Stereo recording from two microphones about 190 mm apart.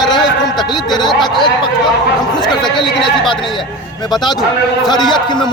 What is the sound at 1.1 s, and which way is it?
Speech, centre (ahead or behind).